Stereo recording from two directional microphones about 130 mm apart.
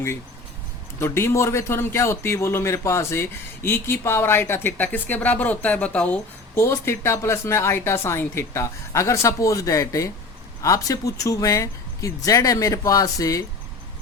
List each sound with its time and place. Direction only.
0.9 s a man's voice: 20° left (ahead or behind)